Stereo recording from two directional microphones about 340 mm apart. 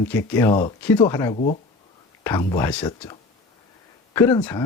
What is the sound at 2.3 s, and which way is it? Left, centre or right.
Speech, centre.